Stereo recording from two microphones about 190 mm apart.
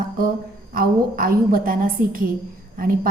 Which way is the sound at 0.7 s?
50° right (ahead or behind).